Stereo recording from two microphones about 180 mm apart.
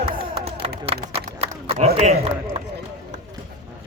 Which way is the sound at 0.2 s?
30° right (ahead or behind).